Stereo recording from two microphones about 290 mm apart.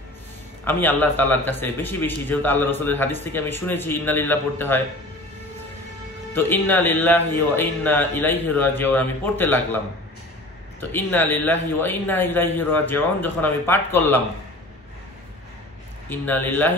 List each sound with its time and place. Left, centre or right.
0.7 s a man's voice: centre
6.3 s a man's voice: centre
10.8 s a man's voice: centre
16.1 s a man's voice: centre